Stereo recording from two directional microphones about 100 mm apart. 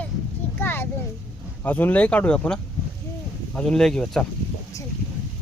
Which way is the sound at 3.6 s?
5° left (ahead or behind).